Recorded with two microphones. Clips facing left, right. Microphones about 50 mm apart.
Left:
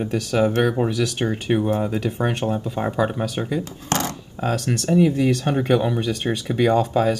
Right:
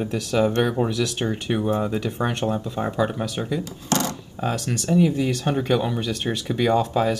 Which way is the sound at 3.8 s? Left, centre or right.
Left.